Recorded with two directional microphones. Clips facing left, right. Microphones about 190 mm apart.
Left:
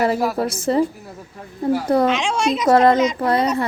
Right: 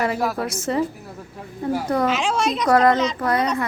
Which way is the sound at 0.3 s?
35° left (ahead or behind).